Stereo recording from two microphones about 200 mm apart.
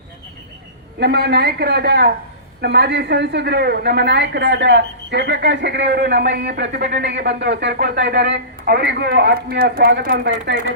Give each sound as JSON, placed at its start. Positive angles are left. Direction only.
{"t": 0.9, "sound": "a woman's voice", "side_deg": -55}